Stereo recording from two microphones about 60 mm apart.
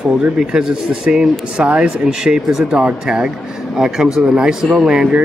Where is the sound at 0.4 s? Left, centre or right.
Centre.